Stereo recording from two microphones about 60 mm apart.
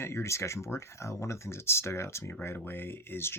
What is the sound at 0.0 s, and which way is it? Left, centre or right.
Speech, left.